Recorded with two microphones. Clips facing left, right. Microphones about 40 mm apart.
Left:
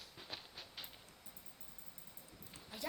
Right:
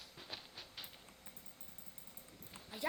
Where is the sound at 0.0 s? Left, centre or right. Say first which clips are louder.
Even; centre.